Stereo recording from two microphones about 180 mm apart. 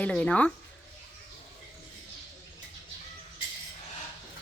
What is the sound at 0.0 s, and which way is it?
Speech, 5° left (ahead or behind).